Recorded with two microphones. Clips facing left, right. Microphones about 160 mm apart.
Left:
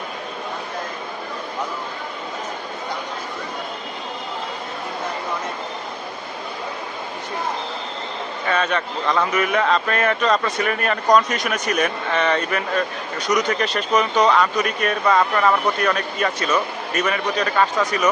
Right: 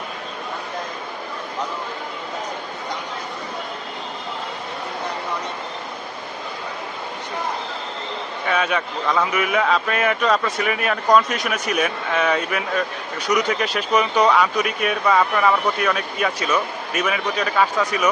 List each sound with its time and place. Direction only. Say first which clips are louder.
8.4 s speech: even; 5° right (ahead or behind)